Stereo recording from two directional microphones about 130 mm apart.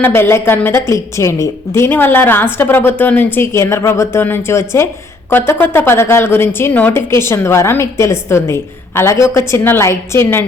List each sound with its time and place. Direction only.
0.0 s a woman's voice: 20° left (ahead or behind)